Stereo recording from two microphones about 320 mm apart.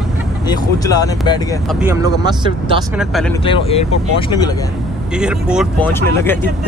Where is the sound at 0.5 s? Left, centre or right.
Centre.